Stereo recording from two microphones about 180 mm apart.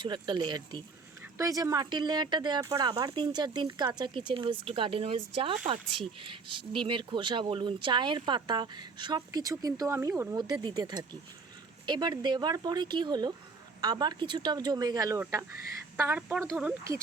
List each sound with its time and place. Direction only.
0.0 s speech: 25° right (ahead or behind)